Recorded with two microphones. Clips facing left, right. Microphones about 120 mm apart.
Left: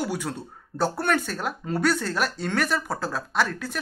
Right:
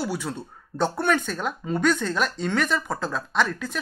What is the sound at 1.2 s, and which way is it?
Speech, 5° left (ahead or behind).